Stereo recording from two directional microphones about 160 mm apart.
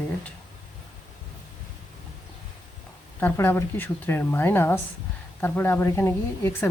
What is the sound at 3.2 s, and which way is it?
Speech, 15° left (ahead or behind).